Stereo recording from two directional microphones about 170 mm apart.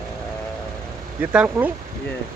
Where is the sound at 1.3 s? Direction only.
10° right (ahead or behind).